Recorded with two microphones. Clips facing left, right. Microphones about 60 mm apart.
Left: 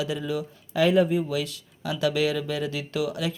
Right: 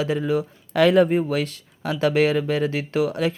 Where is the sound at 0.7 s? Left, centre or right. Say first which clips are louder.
Right 4 dB; right.